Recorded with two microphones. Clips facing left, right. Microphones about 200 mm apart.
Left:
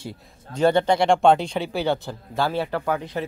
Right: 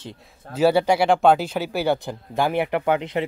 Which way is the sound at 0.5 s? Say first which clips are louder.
Right 1 dB; 5° right (ahead or behind).